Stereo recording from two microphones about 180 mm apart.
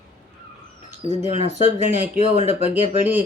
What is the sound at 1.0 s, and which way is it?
Speech, 40° left (ahead or behind).